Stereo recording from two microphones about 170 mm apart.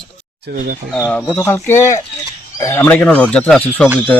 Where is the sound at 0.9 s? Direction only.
10° left (ahead or behind).